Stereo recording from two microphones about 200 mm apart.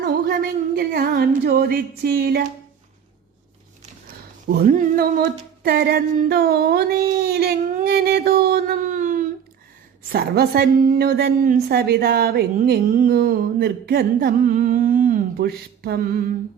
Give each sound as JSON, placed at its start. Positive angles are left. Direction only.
{"t": 0.0, "sound": "a woman's voice", "side_deg": -50}
{"t": 4.4, "sound": "a sound", "side_deg": -45}
{"t": 10.1, "sound": "a woman's voice", "side_deg": -50}